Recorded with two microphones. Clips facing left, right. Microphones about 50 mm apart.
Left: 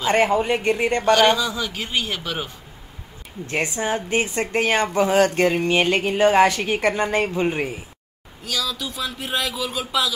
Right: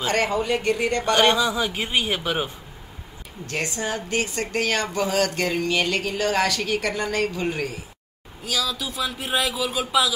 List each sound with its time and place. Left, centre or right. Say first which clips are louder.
0.0 s a woman's voice: left 4 dB; left
1.2 s a man's voice: left 1 dB; centre
3.4 s a woman's voice: left 4 dB; left
8.5 s speech: even; centre